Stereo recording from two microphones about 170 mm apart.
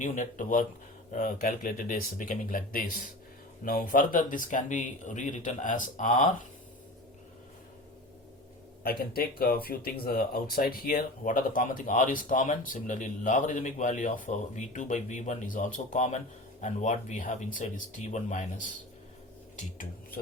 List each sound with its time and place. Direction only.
0.0 s speech: 45° left (ahead or behind)
8.8 s speech: 60° left (ahead or behind); by 18.4 s 45° left (ahead or behind)
19.5 s dishes: 50° left (ahead or behind)